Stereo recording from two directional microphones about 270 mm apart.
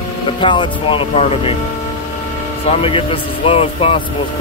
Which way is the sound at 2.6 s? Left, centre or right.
Left.